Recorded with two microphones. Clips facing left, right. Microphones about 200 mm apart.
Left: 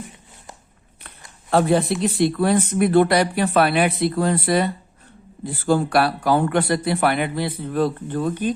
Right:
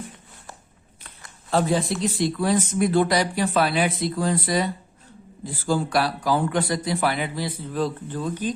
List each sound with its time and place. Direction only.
1.0 s speech: 60° left (ahead or behind)